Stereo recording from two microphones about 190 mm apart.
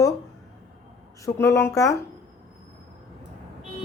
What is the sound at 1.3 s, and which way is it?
Speech, 15° left (ahead or behind).